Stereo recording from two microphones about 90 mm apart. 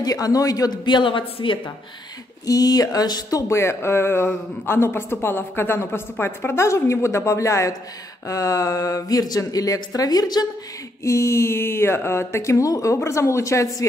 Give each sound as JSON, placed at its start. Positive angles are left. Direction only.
{"t": 0.0, "sound": "a man's voice", "side_deg": 45}
{"t": 0.8, "sound": "a woman's voice", "side_deg": 65}
{"t": 2.4, "sound": "speech", "side_deg": 45}
{"t": 11.1, "sound": "speech", "side_deg": 30}